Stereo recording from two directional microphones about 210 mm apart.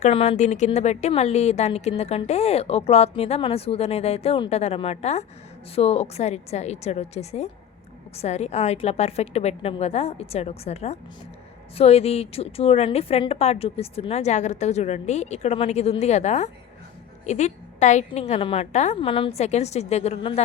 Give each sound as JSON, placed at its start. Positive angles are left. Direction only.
{"t": 0.0, "sound": "speech", "side_deg": 30}